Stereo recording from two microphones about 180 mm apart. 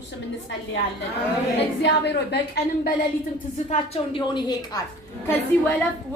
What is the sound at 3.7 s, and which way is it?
A woman's voice, 25° left (ahead or behind).